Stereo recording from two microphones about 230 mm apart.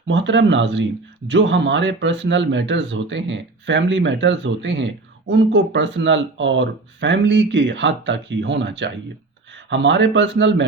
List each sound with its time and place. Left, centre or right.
0.1 s speech: right